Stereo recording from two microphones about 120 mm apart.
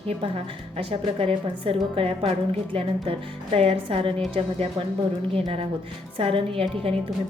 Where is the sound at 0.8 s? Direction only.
50° right (ahead or behind).